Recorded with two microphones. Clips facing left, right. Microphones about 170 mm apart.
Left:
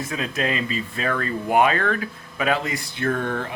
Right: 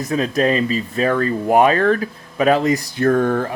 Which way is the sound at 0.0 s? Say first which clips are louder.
Right 8 dB; 40° right (ahead or behind).